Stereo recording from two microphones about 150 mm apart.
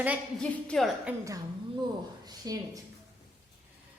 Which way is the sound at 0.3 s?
5° left (ahead or behind).